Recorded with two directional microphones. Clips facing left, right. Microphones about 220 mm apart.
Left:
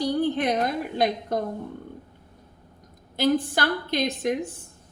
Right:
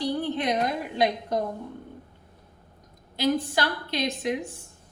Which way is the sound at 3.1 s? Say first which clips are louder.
Left 2 dB; 50° left (ahead or behind).